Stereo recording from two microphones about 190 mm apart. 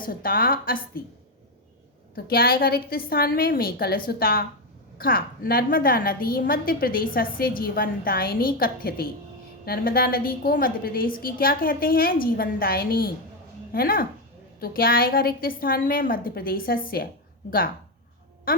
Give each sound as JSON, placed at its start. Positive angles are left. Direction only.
{"t": 0.0, "sound": "a woman's voice", "side_deg": 50}
{"t": 2.1, "sound": "a woman's voice", "side_deg": 50}